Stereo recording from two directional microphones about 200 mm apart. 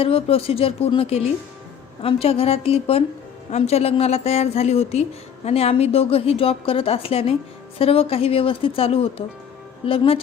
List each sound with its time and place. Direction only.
0.0 s a woman's voice: 30° left (ahead or behind)